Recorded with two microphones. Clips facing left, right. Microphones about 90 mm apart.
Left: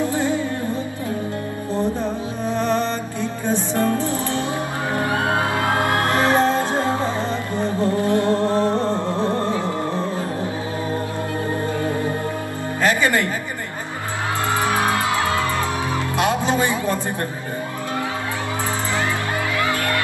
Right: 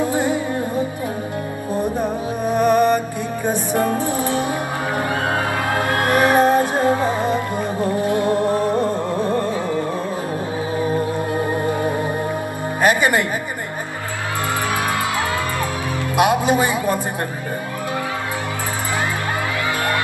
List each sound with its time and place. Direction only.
0.0 s music: 15° right (ahead or behind)
1.7 s music: 15° right (ahead or behind)
6.0 s music: 15° right (ahead or behind)
11.3 s music: 20° right (ahead or behind)
16.2 s music: 15° right (ahead or behind)